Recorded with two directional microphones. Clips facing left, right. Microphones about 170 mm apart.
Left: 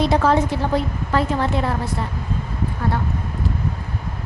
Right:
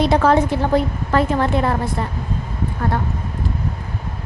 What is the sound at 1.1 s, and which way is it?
A woman's voice, 55° right (ahead or behind).